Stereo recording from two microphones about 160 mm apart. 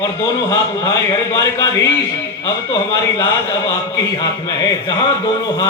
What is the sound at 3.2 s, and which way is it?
A man's voice, 20° left (ahead or behind).